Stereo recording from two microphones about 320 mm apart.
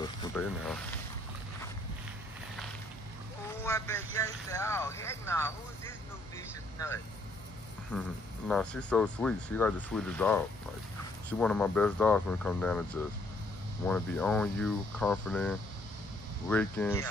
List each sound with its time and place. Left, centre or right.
0.0 s speech: centre
3.6 s speech: centre